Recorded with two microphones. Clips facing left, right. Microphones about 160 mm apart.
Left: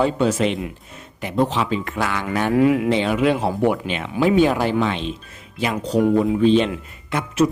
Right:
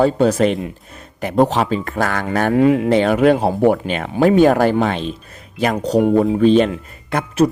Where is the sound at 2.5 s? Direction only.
30° right (ahead or behind).